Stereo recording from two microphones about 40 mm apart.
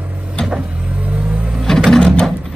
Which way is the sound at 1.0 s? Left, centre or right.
Right.